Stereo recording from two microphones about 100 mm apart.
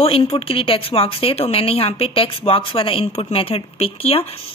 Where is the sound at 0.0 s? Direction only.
70° left (ahead or behind).